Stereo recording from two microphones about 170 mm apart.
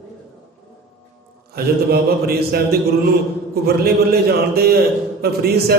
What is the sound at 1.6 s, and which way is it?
Speech, 65° right (ahead or behind).